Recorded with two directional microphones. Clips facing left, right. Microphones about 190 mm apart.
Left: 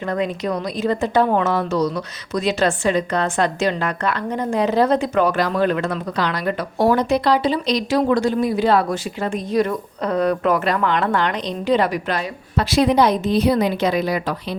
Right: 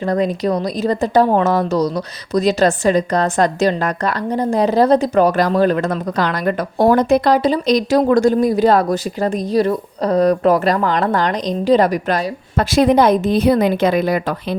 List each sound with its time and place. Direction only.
0.0 s a woman's voice: 35° right (ahead or behind); by 14.3 s 50° right (ahead or behind)